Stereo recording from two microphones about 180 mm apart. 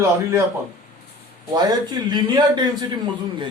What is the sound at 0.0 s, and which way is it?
Speech, 15° right (ahead or behind).